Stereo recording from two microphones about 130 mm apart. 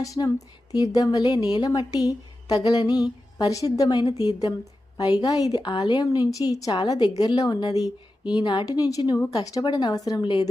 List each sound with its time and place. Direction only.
0.0 s a woman's voice: 25° left (ahead or behind)